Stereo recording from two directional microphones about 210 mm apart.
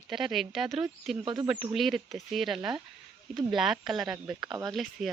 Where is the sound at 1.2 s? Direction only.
20° right (ahead or behind).